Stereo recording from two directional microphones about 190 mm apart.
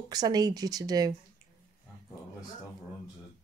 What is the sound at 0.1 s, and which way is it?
Speech, 20° right (ahead or behind).